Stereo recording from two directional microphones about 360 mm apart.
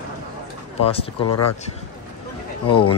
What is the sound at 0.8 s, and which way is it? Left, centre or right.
Speech, centre.